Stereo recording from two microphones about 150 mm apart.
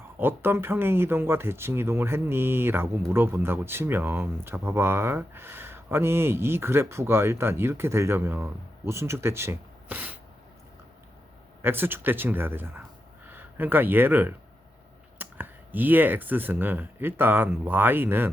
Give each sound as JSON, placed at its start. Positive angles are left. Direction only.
{"t": 0.2, "sound": "speech", "side_deg": -15}
{"t": 11.6, "sound": "speech", "side_deg": -15}